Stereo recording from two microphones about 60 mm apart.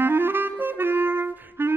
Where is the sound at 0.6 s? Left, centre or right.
Right.